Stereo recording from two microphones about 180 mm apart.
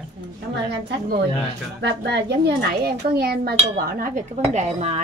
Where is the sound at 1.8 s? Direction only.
70° right (ahead or behind).